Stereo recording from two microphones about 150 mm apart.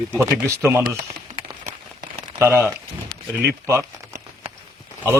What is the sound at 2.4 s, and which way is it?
Speech, 15° right (ahead or behind).